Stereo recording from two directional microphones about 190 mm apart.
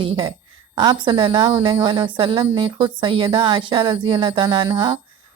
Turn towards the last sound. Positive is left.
turn(degrees=-20)  # may be behind; listen again after turning